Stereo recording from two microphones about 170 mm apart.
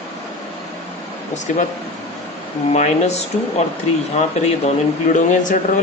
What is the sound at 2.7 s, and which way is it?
Speech, 40° left (ahead or behind).